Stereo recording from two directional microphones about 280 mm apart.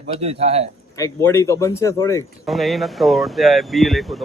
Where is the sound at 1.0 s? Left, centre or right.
Centre.